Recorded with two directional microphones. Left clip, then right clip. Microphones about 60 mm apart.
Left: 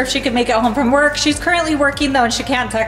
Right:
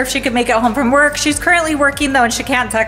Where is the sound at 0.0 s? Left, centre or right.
Right.